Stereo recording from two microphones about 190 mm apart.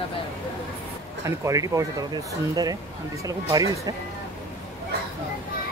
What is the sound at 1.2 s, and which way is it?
Speech, 15° right (ahead or behind).